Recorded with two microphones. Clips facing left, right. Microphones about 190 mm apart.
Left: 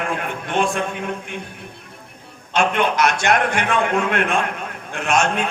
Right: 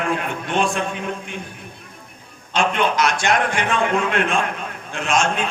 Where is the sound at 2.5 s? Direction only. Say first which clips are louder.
Left 1 dB; 55° left (ahead or behind).